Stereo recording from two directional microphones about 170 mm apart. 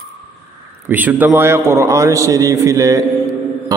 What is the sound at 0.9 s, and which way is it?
A man's voice, 10° right (ahead or behind).